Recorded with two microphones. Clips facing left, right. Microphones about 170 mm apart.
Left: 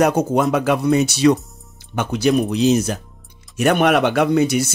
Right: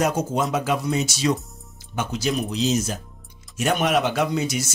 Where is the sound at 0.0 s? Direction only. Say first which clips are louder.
Left 6 dB; 60° left (ahead or behind).